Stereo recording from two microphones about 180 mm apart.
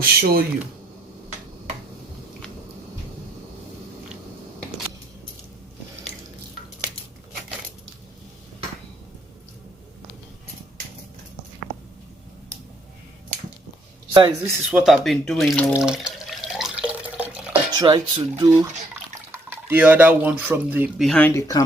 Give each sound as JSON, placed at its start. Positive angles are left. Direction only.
{"t": 0.0, "sound": "speech", "side_deg": -55}
{"t": 14.1, "sound": "speech", "side_deg": -25}
{"t": 15.7, "sound": "drip", "side_deg": -5}
{"t": 17.5, "sound": "speech", "side_deg": -25}
{"t": 19.3, "sound": "speech", "side_deg": -10}
{"t": 21.1, "sound": "speech", "side_deg": 10}